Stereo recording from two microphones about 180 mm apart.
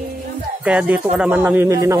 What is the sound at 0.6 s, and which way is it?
Speech, 5° right (ahead or behind).